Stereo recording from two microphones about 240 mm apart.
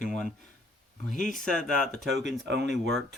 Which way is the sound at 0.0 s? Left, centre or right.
Left.